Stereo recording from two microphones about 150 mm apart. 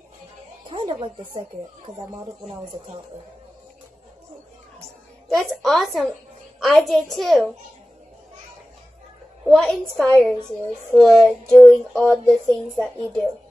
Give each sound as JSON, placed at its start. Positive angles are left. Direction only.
{"t": 0.7, "sound": "a sound", "side_deg": -35}
{"t": 5.3, "sound": "speech", "side_deg": 0}
{"t": 9.5, "sound": "speech", "side_deg": 0}
{"t": 11.2, "sound": "speech", "side_deg": 10}